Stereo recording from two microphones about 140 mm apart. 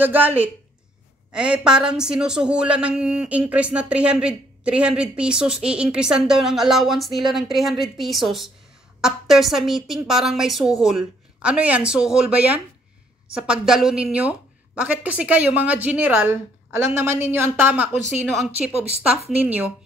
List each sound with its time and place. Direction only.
0.0 s a woman's voice: 15° right (ahead or behind)
19.3 s a woman's voice: 10° right (ahead or behind)